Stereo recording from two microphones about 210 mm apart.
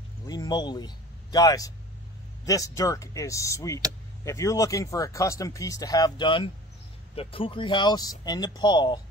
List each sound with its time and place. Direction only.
0.3 s speech: 20° left (ahead or behind)